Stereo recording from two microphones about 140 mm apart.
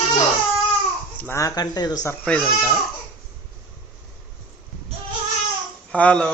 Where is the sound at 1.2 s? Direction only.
20° left (ahead or behind).